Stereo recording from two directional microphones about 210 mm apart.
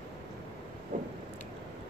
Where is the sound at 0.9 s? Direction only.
40° right (ahead or behind).